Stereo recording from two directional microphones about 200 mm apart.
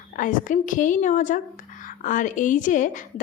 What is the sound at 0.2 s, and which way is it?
A woman's voice, 40° left (ahead or behind).